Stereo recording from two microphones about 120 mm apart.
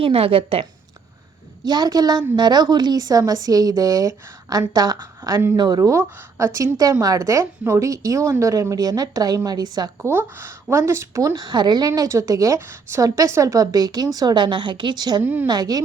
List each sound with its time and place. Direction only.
0.0 s a woman's voice: 55° right (ahead or behind)
1.6 s a woman's voice: 35° right (ahead or behind)
10.0 s a woman's voice: 20° right (ahead or behind); by 11.9 s 35° right (ahead or behind)
11.9 s a woman's voice: 25° right (ahead or behind)
15.2 s a woman's voice: 15° right (ahead or behind)
15.4 s a woman's voice: 35° right (ahead or behind)